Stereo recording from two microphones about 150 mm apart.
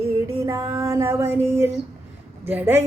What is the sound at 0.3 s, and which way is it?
Female singing, 20° right (ahead or behind).